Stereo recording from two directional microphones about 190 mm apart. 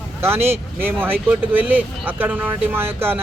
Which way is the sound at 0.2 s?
10° right (ahead or behind).